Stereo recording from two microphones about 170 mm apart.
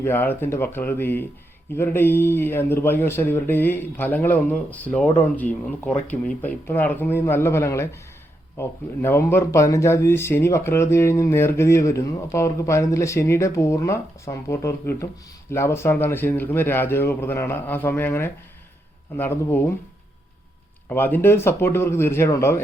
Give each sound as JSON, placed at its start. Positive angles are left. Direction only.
{"t": 0.0, "sound": "speech", "side_deg": 10}
{"t": 20.9, "sound": "speech", "side_deg": 10}